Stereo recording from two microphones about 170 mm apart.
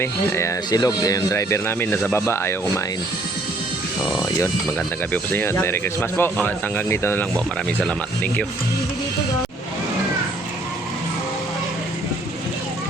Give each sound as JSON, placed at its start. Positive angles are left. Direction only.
{"t": 0.0, "sound": "speech", "side_deg": 15}
{"t": 5.1, "sound": "speech", "side_deg": 10}